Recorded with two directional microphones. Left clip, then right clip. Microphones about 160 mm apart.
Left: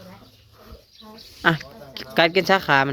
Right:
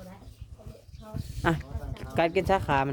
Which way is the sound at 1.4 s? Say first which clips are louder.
Left 8 dB; centre (ahead or behind).